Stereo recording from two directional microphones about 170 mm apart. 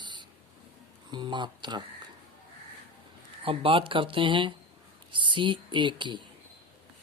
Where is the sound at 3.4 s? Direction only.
30° right (ahead or behind).